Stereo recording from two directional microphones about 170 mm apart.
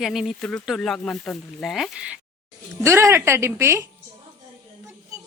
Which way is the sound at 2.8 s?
15° right (ahead or behind).